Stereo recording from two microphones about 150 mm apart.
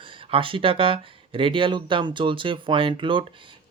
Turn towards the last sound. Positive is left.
turn(degrees=-35)  # may be behind; listen again after turning